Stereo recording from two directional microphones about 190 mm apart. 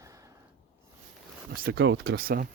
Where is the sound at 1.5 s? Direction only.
55° right (ahead or behind).